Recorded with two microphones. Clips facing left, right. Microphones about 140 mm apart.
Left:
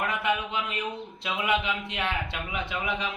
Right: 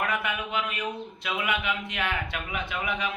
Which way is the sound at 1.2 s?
30° left (ahead or behind).